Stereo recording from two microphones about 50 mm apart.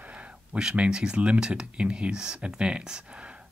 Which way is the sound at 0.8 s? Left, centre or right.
Centre.